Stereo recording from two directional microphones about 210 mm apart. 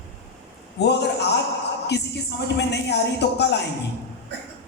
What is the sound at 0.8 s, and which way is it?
Speech, 55° left (ahead or behind).